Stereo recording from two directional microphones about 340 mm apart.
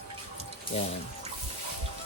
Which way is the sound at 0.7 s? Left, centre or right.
Centre.